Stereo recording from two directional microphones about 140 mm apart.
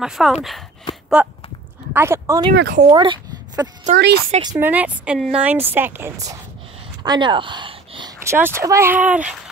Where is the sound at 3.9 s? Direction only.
60° right (ahead or behind).